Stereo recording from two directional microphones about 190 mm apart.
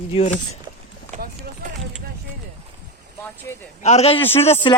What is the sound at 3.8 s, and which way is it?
Speech, 35° left (ahead or behind).